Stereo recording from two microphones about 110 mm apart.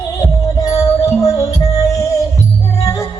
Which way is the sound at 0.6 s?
30° left (ahead or behind).